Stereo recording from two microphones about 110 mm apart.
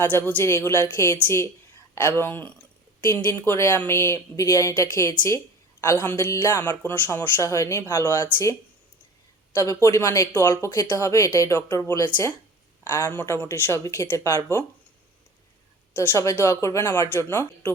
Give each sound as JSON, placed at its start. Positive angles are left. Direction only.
{"t": 0.0, "sound": "speech", "side_deg": 15}
{"t": 9.6, "sound": "speech", "side_deg": 25}
{"t": 11.5, "sound": "speech", "side_deg": 20}
{"t": 16.0, "sound": "speech", "side_deg": 25}